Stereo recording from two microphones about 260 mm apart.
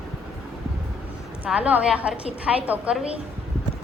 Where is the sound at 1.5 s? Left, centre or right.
Centre.